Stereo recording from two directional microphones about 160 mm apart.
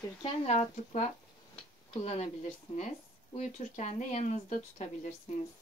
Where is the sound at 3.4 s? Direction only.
45° left (ahead or behind).